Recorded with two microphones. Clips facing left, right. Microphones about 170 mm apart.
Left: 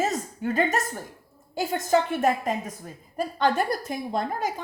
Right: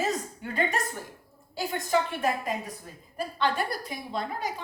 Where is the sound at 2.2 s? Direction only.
45° left (ahead or behind).